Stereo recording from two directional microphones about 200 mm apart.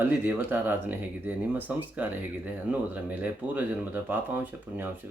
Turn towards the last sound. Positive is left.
turn(degrees=-10)  # may be behind; listen again after turning